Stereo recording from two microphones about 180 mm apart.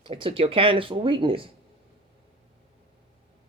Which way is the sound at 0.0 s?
30° right (ahead or behind).